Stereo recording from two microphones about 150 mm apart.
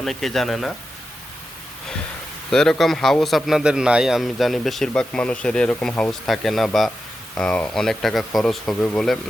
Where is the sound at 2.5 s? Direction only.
5° left (ahead or behind).